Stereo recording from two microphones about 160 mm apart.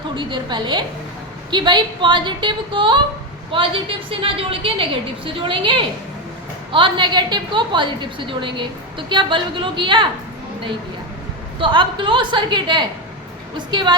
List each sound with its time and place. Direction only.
0.2 s a woman's voice: 30° right (ahead or behind)
11.6 s a woman's voice: 30° right (ahead or behind)